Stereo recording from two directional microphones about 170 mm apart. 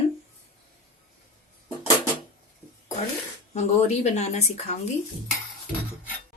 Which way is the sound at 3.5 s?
40° left (ahead or behind).